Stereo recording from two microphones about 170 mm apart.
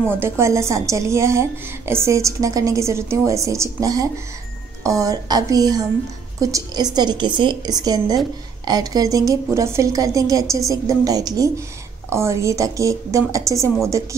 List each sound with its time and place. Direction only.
0.1 s a woman's voice: 15° right (ahead or behind)